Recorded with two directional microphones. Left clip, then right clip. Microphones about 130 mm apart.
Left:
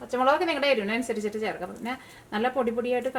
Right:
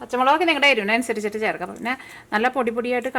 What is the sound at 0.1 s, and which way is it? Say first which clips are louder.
A woman's voice: right 5 dB; 30° right (ahead or behind).